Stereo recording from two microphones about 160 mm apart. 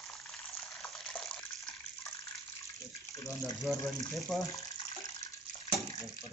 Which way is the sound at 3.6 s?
Centre (ahead or behind).